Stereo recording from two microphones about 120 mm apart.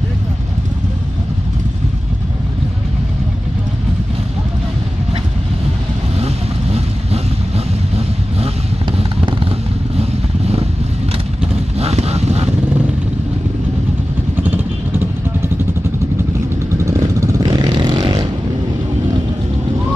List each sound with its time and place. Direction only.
6.1 s vehicle: 60° right (ahead or behind)
9.9 s vehicle: 55° right (ahead or behind)
11.8 s honk: 60° right (ahead or behind)
14.3 s vehicle: 15° right (ahead or behind)
16.8 s vehicle: 25° right (ahead or behind)